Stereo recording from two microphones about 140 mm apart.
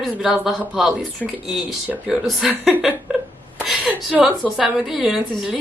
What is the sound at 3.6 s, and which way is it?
A woman's voice, 5° right (ahead or behind).